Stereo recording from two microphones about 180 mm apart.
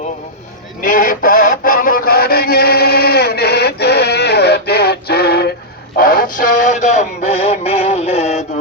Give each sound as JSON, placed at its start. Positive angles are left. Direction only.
{"t": 0.8, "sound": "radio", "side_deg": 50}
{"t": 6.0, "sound": "synthetic singing", "side_deg": 50}